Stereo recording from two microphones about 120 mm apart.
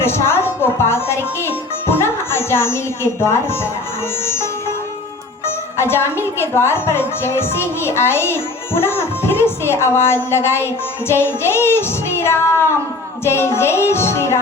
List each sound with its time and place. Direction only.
0.0 s speech: 20° left (ahead or behind)
5.5 s a woman's voice: 20° left (ahead or behind)